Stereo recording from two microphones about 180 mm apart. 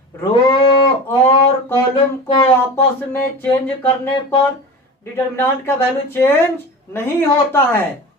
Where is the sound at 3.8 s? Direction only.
10° left (ahead or behind).